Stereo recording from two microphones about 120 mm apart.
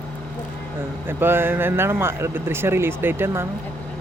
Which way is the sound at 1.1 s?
20° right (ahead or behind).